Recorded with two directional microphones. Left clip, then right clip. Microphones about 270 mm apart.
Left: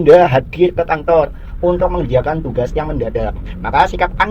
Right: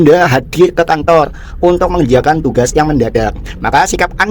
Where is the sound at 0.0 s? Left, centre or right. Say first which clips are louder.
Even; right.